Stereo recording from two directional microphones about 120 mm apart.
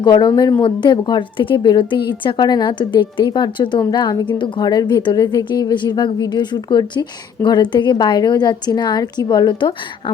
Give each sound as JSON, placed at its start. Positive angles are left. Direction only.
{"t": 0.0, "sound": "speech", "side_deg": 35}